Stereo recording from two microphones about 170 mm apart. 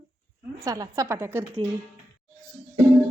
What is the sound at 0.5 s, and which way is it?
A woman's voice, 20° right (ahead or behind).